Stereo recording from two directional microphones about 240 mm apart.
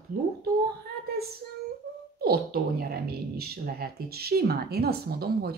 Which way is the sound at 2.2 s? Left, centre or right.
Right.